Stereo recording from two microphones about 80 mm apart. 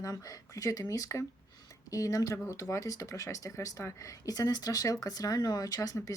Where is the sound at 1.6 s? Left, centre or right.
Left.